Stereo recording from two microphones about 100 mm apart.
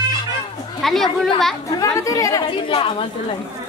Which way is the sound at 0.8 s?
5° left (ahead or behind).